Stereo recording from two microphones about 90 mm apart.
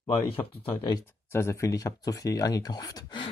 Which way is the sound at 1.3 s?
30° left (ahead or behind).